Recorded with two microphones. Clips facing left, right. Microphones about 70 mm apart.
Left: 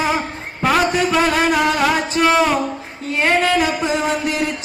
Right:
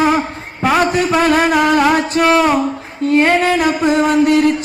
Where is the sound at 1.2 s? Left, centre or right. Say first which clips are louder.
Right 5 dB; right.